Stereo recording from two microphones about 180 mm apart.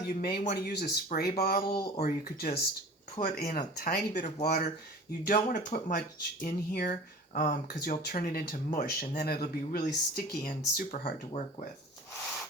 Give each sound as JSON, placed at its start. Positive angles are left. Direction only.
{"t": 0.1, "sound": "speech", "side_deg": 60}
{"t": 5.2, "sound": "speech", "side_deg": 50}